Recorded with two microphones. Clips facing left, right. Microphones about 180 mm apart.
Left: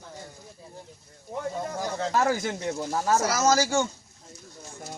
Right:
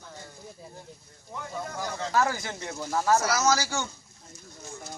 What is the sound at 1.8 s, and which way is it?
Speech, 30° left (ahead or behind).